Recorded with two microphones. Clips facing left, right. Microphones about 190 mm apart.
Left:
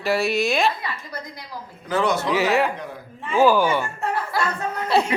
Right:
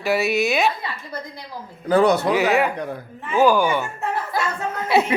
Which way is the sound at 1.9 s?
40° right (ahead or behind).